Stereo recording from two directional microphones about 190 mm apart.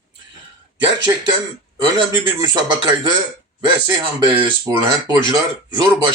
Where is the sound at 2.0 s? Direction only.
20° right (ahead or behind).